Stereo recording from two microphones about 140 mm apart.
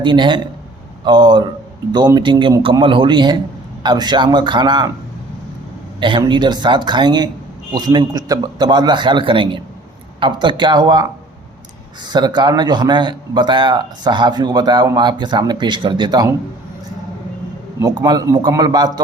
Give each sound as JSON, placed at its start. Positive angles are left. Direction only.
{"t": 0.0, "sound": "a man's voice", "side_deg": -35}
{"t": 6.0, "sound": "a man's voice", "side_deg": -35}
{"t": 12.0, "sound": "a man's voice", "side_deg": -30}
{"t": 17.7, "sound": "a man's voice", "side_deg": -30}